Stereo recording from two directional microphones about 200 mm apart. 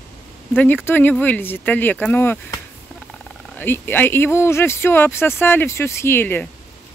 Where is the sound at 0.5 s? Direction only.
10° left (ahead or behind).